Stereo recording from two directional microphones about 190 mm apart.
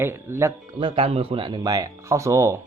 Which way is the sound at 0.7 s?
30° right (ahead or behind).